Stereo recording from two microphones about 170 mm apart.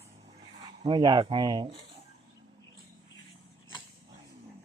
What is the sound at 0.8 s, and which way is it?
Speech, 30° right (ahead or behind).